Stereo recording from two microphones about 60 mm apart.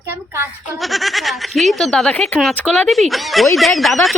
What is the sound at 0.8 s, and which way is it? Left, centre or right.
Speech, centre.